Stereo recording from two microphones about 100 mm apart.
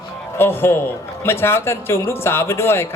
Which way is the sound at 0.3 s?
25° left (ahead or behind).